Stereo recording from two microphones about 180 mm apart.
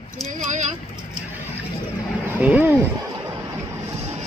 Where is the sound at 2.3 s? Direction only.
10° right (ahead or behind).